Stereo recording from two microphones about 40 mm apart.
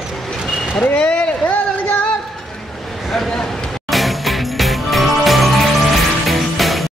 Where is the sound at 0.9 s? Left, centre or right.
Left.